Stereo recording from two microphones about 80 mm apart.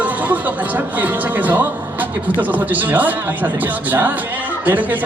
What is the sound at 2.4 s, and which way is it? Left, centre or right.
A man's voice, centre.